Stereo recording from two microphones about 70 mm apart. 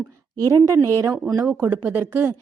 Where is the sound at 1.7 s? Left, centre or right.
Right.